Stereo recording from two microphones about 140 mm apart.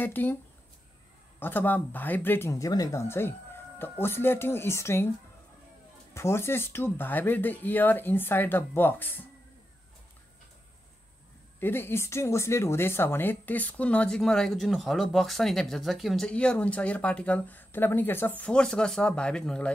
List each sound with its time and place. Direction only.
0.0 s speech: 15° left (ahead or behind)
1.4 s speech: 15° left (ahead or behind)
6.1 s speech: 20° left (ahead or behind)
11.6 s speech: 15° left (ahead or behind)